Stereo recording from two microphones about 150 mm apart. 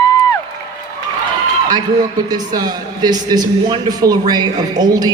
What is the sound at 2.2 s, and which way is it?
A man's voice, 25° right (ahead or behind).